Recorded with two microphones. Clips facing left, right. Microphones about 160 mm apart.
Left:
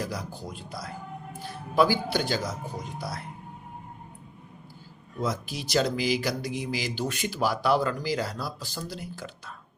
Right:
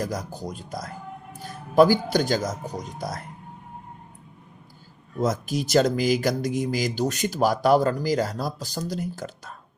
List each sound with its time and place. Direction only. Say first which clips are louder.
0.0 s speech: right 4 dB; 45° right (ahead or behind)
5.2 s speech: right 6 dB; 45° right (ahead or behind)